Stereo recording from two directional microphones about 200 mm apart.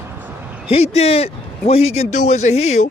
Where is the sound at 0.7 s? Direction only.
30° left (ahead or behind).